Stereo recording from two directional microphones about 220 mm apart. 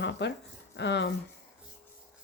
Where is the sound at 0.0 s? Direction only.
55° left (ahead or behind).